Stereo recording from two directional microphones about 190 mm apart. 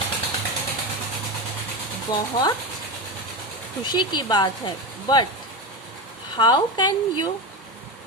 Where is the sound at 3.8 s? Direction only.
20° left (ahead or behind).